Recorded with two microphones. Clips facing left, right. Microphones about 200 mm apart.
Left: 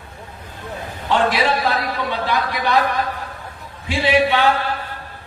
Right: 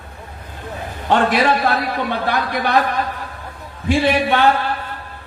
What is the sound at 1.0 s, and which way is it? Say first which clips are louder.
A man's voice: right 2 dB; 55° right (ahead or behind).